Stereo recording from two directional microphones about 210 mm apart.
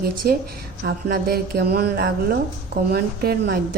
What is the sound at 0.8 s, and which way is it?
Speech, 45° right (ahead or behind).